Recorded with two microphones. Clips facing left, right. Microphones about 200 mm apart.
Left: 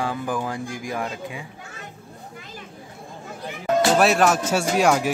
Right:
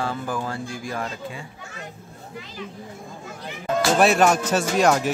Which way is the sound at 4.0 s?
Centre (ahead or behind).